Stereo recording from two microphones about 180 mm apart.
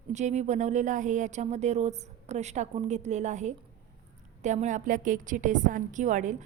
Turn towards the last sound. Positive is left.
turn(degrees=-45)  # may be behind; listen again after turning